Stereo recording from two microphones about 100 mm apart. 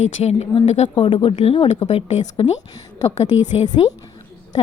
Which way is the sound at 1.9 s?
90° left.